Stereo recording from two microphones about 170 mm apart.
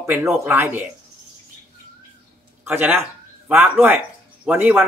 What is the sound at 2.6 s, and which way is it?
Speech, 10° right (ahead or behind).